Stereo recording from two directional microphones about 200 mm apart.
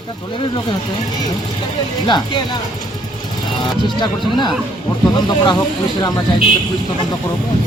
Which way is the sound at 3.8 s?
20° left (ahead or behind).